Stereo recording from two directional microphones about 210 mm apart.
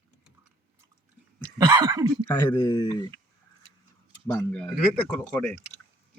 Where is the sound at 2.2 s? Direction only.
20° left (ahead or behind).